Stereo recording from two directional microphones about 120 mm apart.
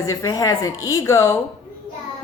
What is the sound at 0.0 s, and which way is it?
A woman's voice, 30° left (ahead or behind).